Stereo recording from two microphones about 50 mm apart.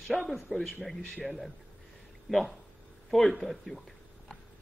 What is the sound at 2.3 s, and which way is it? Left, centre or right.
A man's voice, centre.